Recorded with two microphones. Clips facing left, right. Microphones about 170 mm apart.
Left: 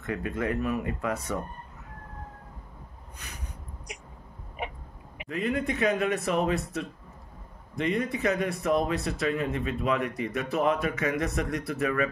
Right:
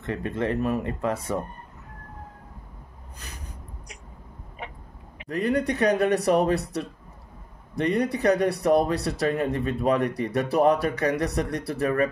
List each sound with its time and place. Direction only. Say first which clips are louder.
0.0 s speech: right 3 dB; 30° right (ahead or behind)
3.2 s a sound: right 1 dB; 30° right (ahead or behind)
5.3 s speech: right 4 dB; 40° right (ahead or behind)